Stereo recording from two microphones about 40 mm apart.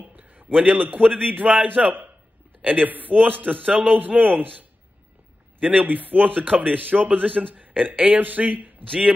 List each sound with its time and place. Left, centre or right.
0.0 s a sound: right
0.7 s a man's voice: right
5.6 s a man's voice: right
5.9 s a man's voice: right